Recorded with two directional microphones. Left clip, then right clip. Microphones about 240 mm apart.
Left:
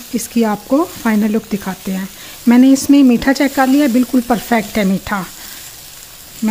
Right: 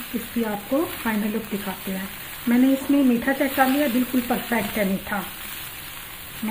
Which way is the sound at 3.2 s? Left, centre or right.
Left.